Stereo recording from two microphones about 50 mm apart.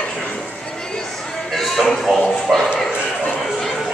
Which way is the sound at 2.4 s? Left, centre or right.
Centre.